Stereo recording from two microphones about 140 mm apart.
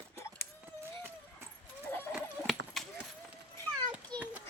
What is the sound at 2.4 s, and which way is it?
Horse, centre (ahead or behind).